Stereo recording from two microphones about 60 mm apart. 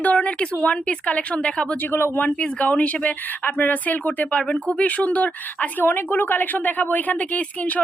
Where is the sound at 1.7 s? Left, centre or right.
Left.